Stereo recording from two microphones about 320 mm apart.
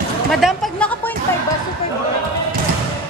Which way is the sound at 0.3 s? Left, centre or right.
Centre.